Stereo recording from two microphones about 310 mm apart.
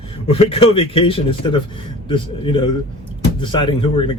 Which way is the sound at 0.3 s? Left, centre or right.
Centre.